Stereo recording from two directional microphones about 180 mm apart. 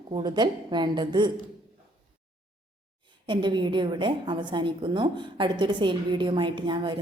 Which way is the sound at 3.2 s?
25° right (ahead or behind).